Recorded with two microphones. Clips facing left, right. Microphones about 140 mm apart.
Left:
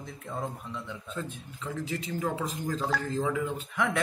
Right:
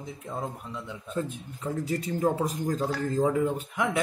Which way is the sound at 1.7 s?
40° right (ahead or behind).